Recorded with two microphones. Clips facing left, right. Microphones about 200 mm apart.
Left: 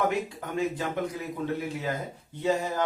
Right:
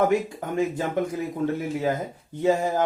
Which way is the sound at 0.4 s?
45° right (ahead or behind).